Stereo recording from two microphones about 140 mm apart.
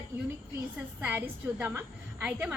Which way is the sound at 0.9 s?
15° right (ahead or behind).